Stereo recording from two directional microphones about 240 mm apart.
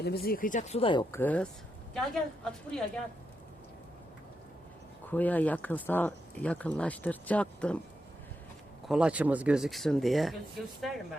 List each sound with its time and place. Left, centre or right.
0.0 s speech: left; by 1.2 s centre
1.2 s speech: centre
5.1 s speech: centre
8.9 s speech: centre